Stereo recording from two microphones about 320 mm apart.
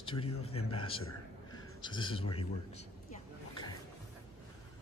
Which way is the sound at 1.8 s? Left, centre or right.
Centre.